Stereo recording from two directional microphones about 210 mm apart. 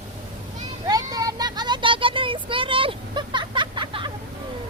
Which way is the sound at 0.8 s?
20° right (ahead or behind).